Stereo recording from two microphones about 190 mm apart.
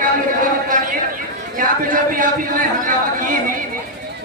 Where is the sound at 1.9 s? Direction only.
45° right (ahead or behind).